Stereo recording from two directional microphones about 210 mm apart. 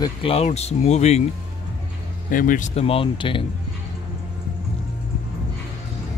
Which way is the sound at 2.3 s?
40° left (ahead or behind).